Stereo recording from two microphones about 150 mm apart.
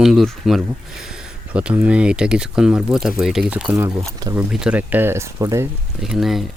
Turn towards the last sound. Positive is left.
turn(degrees=0)  # may be behind; listen again after turning